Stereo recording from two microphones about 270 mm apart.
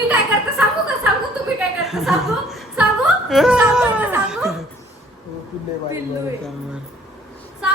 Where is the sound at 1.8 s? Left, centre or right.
Centre.